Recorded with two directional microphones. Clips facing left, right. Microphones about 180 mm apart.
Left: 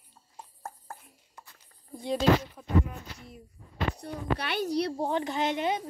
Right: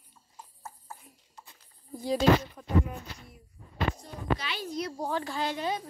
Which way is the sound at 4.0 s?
60° left (ahead or behind).